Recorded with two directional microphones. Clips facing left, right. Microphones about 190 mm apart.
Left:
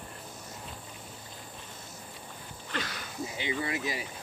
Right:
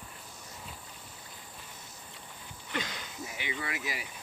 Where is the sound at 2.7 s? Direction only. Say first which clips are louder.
Even; 20° right (ahead or behind).